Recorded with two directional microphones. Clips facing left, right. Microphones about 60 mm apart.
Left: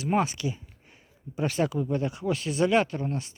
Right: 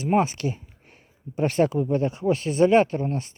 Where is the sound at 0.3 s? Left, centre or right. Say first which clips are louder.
Right 3 dB; right.